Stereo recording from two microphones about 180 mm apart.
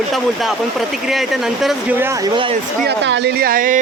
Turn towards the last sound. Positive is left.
turn(degrees=-50)  # may be behind; listen again after turning